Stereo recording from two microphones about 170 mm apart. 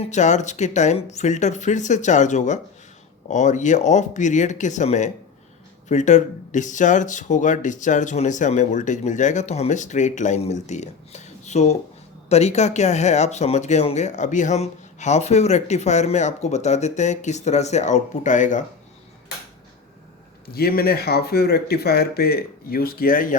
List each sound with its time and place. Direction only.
0.0 s speech: 45° left (ahead or behind)
20.5 s speech: 65° left (ahead or behind)